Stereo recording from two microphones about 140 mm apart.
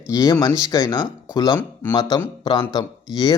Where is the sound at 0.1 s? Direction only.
25° left (ahead or behind).